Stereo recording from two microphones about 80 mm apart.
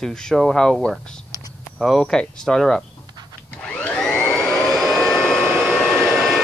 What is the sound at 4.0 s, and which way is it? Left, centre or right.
Vacuum cleaner, centre.